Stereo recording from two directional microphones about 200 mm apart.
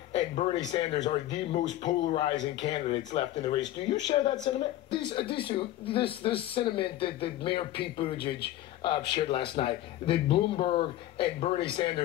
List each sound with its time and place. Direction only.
0.1 s a sound: 25° left (ahead or behind)
0.7 s speech: 25° left (ahead or behind)
3.6 s speech: 65° left (ahead or behind)
4.1 s speech: 25° left (ahead or behind)
9.1 s speech: 25° left (ahead or behind)